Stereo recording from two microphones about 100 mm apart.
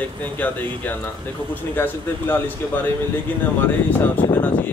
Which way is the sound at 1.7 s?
20° left (ahead or behind).